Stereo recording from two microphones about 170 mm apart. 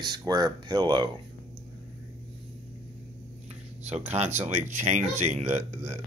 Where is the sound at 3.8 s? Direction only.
40° right (ahead or behind).